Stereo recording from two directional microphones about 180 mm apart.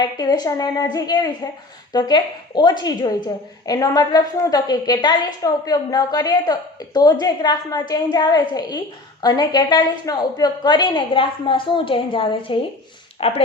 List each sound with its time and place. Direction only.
0.0 s a woman's voice: 20° left (ahead or behind)